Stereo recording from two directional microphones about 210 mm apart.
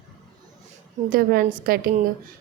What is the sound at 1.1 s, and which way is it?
Speech, 45° right (ahead or behind).